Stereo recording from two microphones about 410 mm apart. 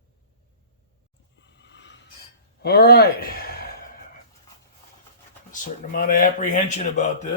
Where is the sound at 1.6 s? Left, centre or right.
Left.